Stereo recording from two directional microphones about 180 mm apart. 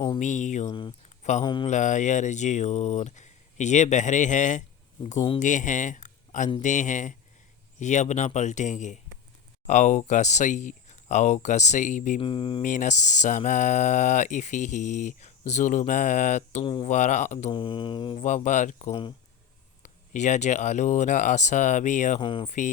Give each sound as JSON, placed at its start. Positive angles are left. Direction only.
{"t": 0.2, "sound": "speech", "side_deg": 45}
{"t": 0.7, "sound": "mantra", "side_deg": 25}
{"t": 1.2, "sound": "mantra", "side_deg": 40}
{"t": 1.6, "sound": "speech", "side_deg": 45}
{"t": 12.2, "sound": "mantra", "side_deg": 30}
{"t": 12.6, "sound": "speech", "side_deg": 45}
{"t": 16.6, "sound": "mantra", "side_deg": 30}
{"t": 16.9, "sound": "speech", "side_deg": 40}
{"t": 17.5, "sound": "mantra", "side_deg": 25}
{"t": 18.2, "sound": "speech", "side_deg": 40}
{"t": 19.8, "sound": "speech", "side_deg": 40}
{"t": 22.2, "sound": "mantra", "side_deg": 30}
{"t": 22.4, "sound": "speech", "side_deg": 45}